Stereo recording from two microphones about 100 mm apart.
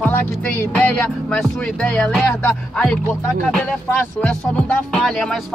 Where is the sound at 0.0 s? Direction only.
15° left (ahead or behind).